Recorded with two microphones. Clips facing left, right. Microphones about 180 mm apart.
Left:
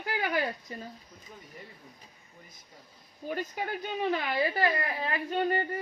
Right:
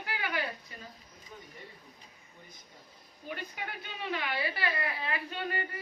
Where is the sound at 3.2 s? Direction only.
40° left (ahead or behind).